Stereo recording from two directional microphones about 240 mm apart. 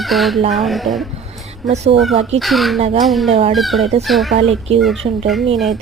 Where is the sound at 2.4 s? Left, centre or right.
Centre.